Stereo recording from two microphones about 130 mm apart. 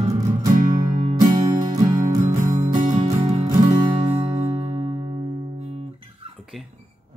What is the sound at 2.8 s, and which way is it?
Music, 65° right (ahead or behind).